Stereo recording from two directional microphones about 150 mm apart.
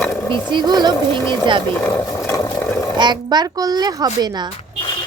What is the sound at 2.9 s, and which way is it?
A child's voice, 30° right (ahead or behind).